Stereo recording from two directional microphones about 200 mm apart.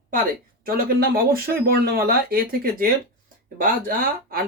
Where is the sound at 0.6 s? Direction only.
50° right (ahead or behind).